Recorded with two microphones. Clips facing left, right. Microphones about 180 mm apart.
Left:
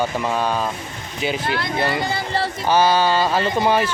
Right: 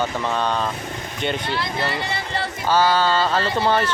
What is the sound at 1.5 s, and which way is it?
Speech, 55° left (ahead or behind).